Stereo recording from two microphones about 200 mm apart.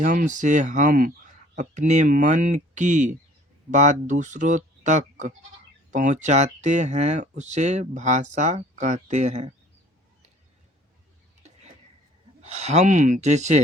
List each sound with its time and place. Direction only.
0.0 s speech: 40° right (ahead or behind)
12.4 s speech: 35° right (ahead or behind)